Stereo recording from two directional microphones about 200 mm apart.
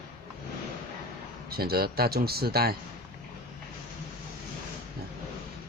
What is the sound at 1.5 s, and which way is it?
Speech, 50° right (ahead or behind).